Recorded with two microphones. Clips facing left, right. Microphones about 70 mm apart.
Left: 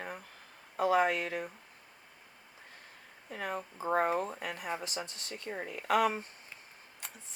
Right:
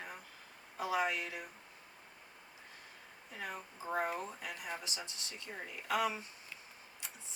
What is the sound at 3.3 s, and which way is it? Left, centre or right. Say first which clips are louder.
Speech: left 7 dB; left.